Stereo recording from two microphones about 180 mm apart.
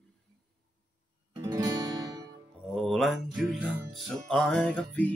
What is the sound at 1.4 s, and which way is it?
Music, 20° right (ahead or behind).